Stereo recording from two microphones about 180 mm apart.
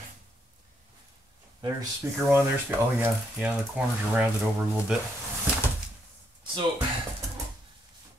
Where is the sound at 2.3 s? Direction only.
10° right (ahead or behind).